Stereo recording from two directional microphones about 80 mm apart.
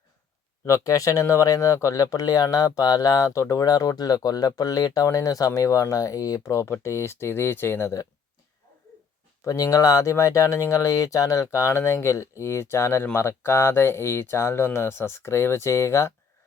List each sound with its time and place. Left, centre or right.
0.6 s speech: left
9.5 s speech: left